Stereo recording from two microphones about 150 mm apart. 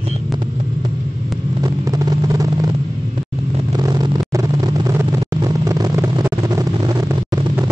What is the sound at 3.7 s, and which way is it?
Vehicle, 25° right (ahead or behind).